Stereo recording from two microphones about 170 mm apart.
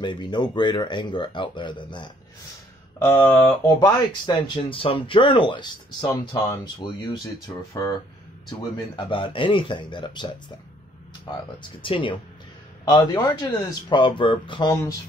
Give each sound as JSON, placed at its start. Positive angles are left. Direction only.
{"t": 0.0, "sound": "speech", "side_deg": 25}
{"t": 3.0, "sound": "speech", "side_deg": 10}
{"t": 3.8, "sound": "speech", "side_deg": 30}
{"t": 11.8, "sound": "speech", "side_deg": 30}
{"t": 12.9, "sound": "speech", "side_deg": 20}